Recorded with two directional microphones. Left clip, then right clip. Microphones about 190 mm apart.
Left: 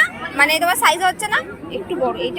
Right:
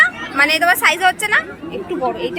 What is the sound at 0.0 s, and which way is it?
Speech, 20° right (ahead or behind).